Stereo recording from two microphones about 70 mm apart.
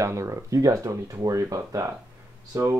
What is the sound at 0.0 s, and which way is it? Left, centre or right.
Speech, right.